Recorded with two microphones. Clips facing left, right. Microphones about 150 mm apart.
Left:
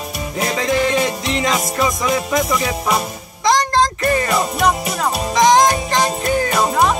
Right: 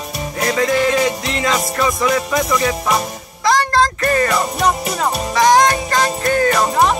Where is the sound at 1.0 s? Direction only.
20° left (ahead or behind).